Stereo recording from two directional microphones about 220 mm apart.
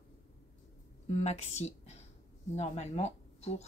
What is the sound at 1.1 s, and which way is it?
Speech, 30° left (ahead or behind).